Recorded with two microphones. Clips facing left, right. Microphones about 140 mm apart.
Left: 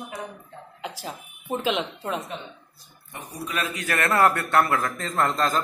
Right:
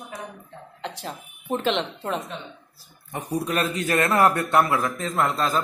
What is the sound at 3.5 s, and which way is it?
Speech, 30° right (ahead or behind).